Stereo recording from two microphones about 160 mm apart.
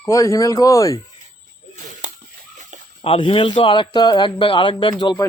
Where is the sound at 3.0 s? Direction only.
35° left (ahead or behind).